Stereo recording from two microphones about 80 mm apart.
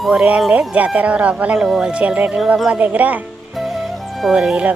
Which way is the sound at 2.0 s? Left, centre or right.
Centre.